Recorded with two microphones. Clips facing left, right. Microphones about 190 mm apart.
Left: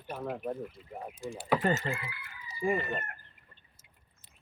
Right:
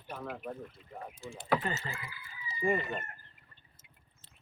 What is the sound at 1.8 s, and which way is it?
Speech, 65° left (ahead or behind).